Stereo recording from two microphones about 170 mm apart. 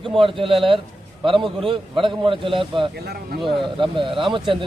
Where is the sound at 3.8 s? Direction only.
30° right (ahead or behind).